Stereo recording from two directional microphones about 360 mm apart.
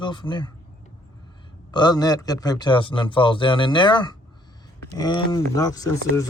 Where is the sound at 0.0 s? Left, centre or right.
Centre.